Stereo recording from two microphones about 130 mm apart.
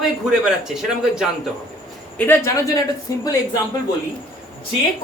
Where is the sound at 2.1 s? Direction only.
15° left (ahead or behind).